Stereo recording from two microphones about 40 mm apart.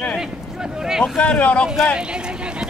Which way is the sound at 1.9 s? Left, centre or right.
Right.